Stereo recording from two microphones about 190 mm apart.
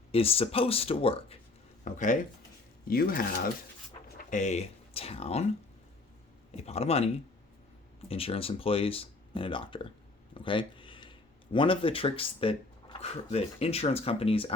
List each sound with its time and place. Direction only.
0.1 s speech: 30° left (ahead or behind)
1.8 s speech: 40° left (ahead or behind)
4.3 s speech: 40° left (ahead or behind)
6.7 s speech: 35° left (ahead or behind)
10.3 s a sound: 25° left (ahead or behind)
11.5 s speech: 25° left (ahead or behind)